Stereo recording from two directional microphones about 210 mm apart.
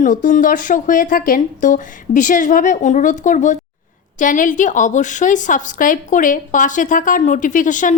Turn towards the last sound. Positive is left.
turn(degrees=40)  # may be behind; listen again after turning